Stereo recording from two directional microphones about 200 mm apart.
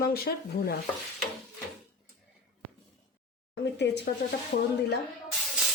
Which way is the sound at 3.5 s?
60° left (ahead or behind).